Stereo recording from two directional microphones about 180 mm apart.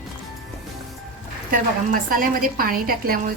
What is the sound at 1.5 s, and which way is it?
A woman's voice, 50° right (ahead or behind).